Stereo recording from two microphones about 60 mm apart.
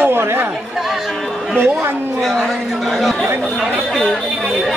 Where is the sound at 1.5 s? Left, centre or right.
Right.